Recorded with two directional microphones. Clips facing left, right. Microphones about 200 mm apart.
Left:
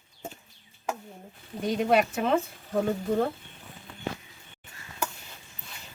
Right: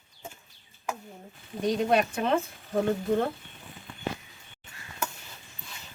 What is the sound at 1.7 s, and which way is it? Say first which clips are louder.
Speech: left 1 dB; 5° left (ahead or behind).